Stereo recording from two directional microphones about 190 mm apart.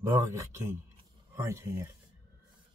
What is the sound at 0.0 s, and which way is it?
Speech, 15° right (ahead or behind).